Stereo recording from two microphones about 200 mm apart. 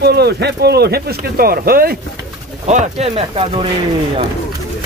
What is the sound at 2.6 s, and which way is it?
Speech, 35° right (ahead or behind).